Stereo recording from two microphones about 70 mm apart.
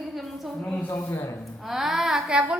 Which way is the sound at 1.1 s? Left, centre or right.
Left.